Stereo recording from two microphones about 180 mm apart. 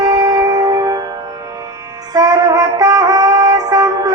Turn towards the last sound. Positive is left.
turn(degrees=-20)  # may be behind; listen again after turning